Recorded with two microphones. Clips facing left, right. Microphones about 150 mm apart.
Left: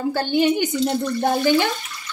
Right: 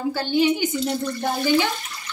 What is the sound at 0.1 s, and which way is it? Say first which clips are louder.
Speech: left 1 dB; 50° left (ahead or behind).